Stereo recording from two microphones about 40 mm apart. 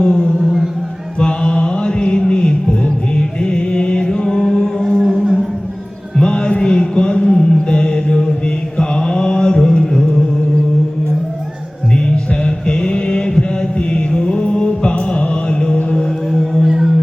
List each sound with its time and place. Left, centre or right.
0.0 s music: centre
0.3 s music: centre
1.2 s chant: left
4.9 s music: centre
6.1 s a sound: left
8.8 s mantra: centre
11.9 s music: left
16.6 s singing bowl: centre